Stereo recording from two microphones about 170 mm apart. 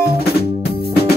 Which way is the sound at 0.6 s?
65° left (ahead or behind).